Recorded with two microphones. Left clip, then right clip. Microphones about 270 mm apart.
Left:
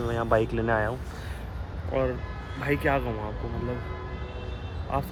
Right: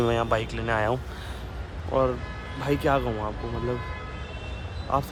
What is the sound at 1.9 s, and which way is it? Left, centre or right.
A man's voice, centre.